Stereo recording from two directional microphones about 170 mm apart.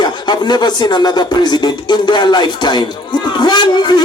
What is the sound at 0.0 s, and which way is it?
A man's voice, 25° left (ahead or behind).